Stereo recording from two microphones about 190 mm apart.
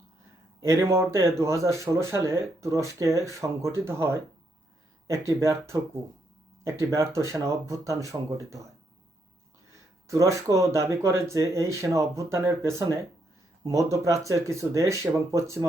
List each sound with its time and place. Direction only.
0.6 s speech: 15° right (ahead or behind)
10.1 s speech: 15° right (ahead or behind)